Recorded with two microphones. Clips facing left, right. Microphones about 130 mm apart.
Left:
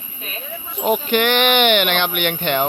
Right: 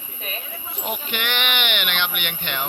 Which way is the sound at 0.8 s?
45° left (ahead or behind).